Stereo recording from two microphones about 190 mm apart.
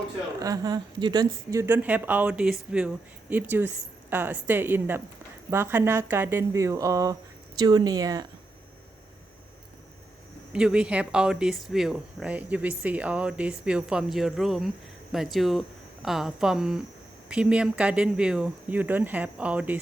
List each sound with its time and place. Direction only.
0.3 s speech: 20° right (ahead or behind)
10.5 s speech: 5° right (ahead or behind)